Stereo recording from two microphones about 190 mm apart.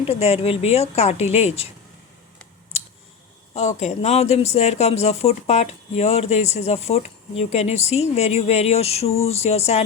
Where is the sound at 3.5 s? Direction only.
35° left (ahead or behind).